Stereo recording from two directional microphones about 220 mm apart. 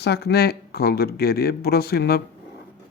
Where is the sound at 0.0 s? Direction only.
45° left (ahead or behind).